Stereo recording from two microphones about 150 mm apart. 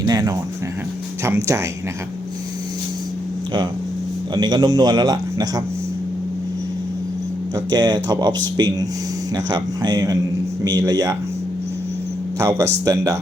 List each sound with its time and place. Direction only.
0.0 s speech: 25° right (ahead or behind)
4.4 s speech: 30° right (ahead or behind)
7.5 s speech: 30° right (ahead or behind)
12.4 s speech: 20° right (ahead or behind)